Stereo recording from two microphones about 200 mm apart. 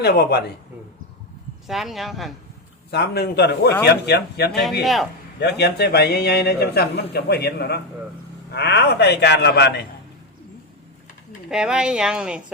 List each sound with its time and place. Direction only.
0.0 s a man's voice: 55° left (ahead or behind)
1.6 s speech: centre (ahead or behind)
2.9 s a man's voice: 55° left (ahead or behind)
4.8 s speech: centre (ahead or behind)
5.4 s a man's voice: 55° left (ahead or behind)
11.4 s speech: 5° right (ahead or behind)